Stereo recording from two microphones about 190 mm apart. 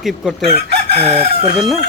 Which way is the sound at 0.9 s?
30° right (ahead or behind).